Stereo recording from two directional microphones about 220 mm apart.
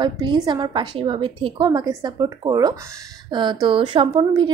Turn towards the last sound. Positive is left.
turn(degrees=-20)  # may be behind; listen again after turning